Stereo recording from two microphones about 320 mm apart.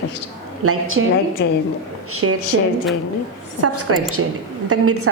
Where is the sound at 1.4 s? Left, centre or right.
Left.